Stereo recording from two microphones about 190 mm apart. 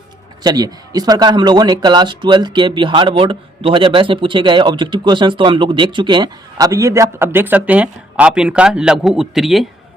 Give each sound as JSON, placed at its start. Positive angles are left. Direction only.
{"t": 0.4, "sound": "speech", "side_deg": -20}